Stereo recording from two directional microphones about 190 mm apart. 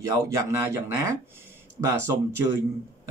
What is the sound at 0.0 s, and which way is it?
Speech, 15° right (ahead or behind).